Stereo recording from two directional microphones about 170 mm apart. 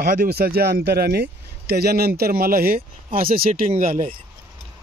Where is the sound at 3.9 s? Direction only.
35° right (ahead or behind).